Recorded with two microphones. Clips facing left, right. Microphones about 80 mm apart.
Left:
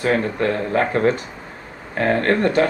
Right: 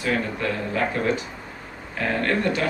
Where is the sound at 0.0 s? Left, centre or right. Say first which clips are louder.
Left 6 dB; left.